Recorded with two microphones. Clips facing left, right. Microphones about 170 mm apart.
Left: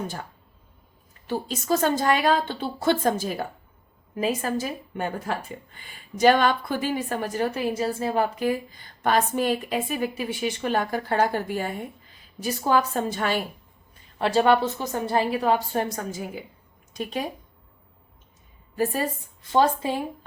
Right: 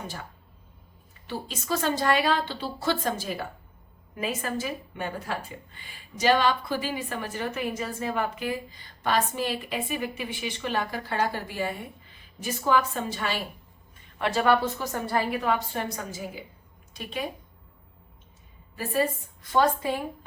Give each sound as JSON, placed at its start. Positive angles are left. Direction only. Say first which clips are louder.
{"t": 1.3, "sound": "a woman's voice", "louder": "left 6 dB", "side_deg": 45}
{"t": 12.1, "sound": "a woman's voice", "louder": "left 4 dB", "side_deg": 35}
{"t": 14.2, "sound": "a woman's voice", "louder": "left 3 dB", "side_deg": 30}
{"t": 16.9, "sound": "a woman's voice", "louder": "left 5 dB", "side_deg": 45}
{"t": 18.8, "sound": "a woman's voice", "louder": "left 1 dB", "side_deg": 40}
{"t": 19.4, "sound": "a woman's voice", "louder": "left 2 dB", "side_deg": 25}